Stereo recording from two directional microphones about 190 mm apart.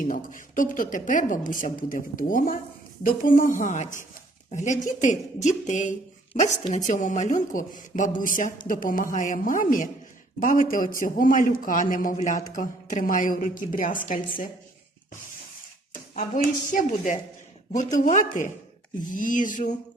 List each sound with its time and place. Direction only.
0.0 s speech: 45° left (ahead or behind)
16.7 s speech: 40° left (ahead or behind)